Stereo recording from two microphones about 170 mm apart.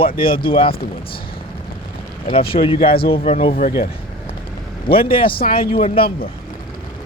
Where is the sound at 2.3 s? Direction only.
30° left (ahead or behind).